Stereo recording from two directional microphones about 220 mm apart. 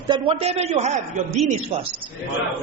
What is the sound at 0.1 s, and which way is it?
A man's voice, 25° right (ahead or behind).